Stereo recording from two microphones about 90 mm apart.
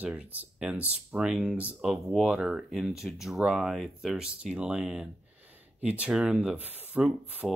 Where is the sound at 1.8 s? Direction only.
5° right (ahead or behind).